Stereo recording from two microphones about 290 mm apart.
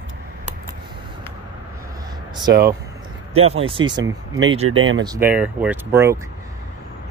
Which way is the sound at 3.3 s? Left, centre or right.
Centre.